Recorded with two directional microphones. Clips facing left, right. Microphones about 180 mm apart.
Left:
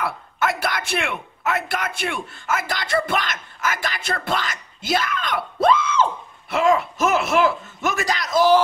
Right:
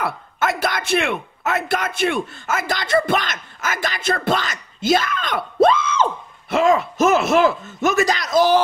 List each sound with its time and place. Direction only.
0.0 s a man's voice: 20° right (ahead or behind)
6.6 s speech: 40° right (ahead or behind)
7.1 s speech: 20° right (ahead or behind)